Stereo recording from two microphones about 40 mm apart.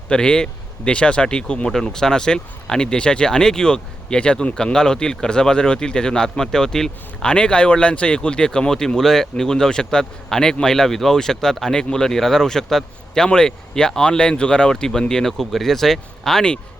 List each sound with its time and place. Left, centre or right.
0.1 s speech: left
1.7 s a man's voice: centre
7.3 s a man's voice: left; by 16.4 s centre